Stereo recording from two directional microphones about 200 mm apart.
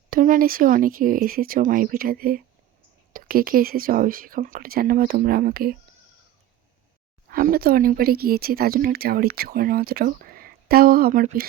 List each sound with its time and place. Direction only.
0.1 s speech: 45° right (ahead or behind)
7.3 s speech: 45° right (ahead or behind)